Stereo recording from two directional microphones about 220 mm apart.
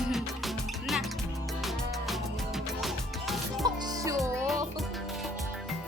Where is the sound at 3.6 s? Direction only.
20° right (ahead or behind).